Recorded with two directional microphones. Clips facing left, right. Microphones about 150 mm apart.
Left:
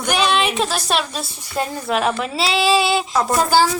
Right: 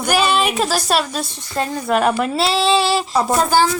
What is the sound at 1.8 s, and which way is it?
Child singing, centre (ahead or behind).